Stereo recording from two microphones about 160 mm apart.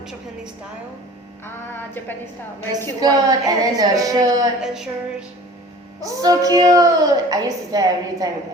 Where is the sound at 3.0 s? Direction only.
25° right (ahead or behind).